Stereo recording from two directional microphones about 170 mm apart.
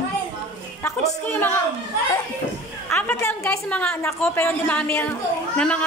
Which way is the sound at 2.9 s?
10° left (ahead or behind).